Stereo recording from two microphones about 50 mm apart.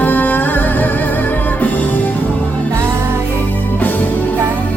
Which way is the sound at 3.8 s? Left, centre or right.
Left.